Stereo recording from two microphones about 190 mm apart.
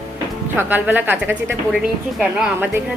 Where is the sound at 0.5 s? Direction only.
10° right (ahead or behind).